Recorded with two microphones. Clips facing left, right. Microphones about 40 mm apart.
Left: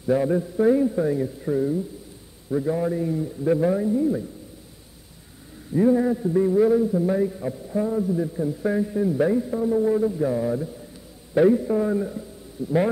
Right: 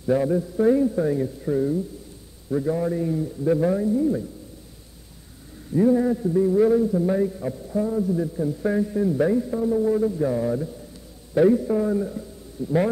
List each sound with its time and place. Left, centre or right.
0.0 s a man's voice: centre
5.7 s a man's voice: centre
7.7 s a man's voice: centre
8.1 s a man's voice: centre